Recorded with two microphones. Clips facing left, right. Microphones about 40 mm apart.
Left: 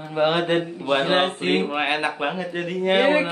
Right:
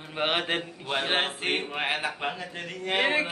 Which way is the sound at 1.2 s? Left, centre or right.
Centre.